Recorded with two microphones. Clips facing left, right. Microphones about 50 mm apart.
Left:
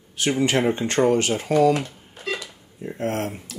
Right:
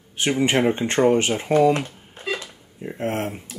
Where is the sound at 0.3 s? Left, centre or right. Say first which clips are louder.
Right 1 dB; centre.